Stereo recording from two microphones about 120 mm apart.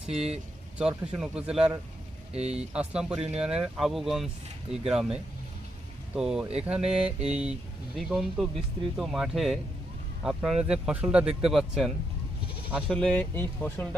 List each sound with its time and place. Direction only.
0.8 s speech: 10° right (ahead or behind)
2.3 s mantra: 60° right (ahead or behind)
2.7 s speech: 10° right (ahead or behind)
6.1 s speech: 5° right (ahead or behind)
6.9 s mantra: 55° right (ahead or behind)
7.9 s speech: centre (ahead or behind)
12.9 s speech: 10° left (ahead or behind)